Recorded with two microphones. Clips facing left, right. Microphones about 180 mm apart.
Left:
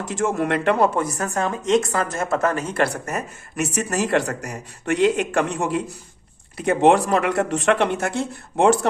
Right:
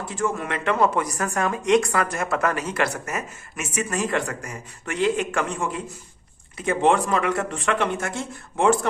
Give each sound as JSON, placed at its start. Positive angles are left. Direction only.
{"t": 0.0, "sound": "speech", "side_deg": 90}
{"t": 0.3, "sound": "speech", "side_deg": 60}
{"t": 0.9, "sound": "a woman's voice", "side_deg": 25}
{"t": 3.8, "sound": "speech", "side_deg": 70}
{"t": 7.3, "sound": "speech", "side_deg": 40}
{"t": 8.1, "sound": "speech", "side_deg": 65}